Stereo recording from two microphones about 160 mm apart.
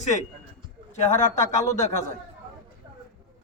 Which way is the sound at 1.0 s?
45° left (ahead or behind).